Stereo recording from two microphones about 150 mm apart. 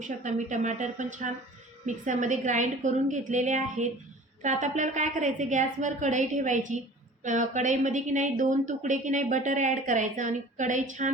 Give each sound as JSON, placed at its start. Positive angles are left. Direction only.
{"t": 0.0, "sound": "a woman's voice", "side_deg": -55}